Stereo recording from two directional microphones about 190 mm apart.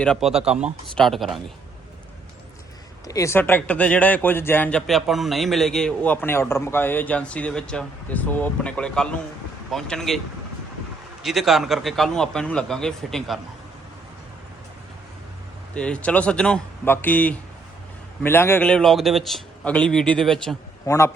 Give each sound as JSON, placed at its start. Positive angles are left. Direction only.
{"t": 0.0, "sound": "a man's voice", "side_deg": 0}
{"t": 3.1, "sound": "a man's voice", "side_deg": 15}
{"t": 11.2, "sound": "a man's voice", "side_deg": 0}
{"t": 15.7, "sound": "a man's voice", "side_deg": 5}
{"t": 20.8, "sound": "a man's voice", "side_deg": 15}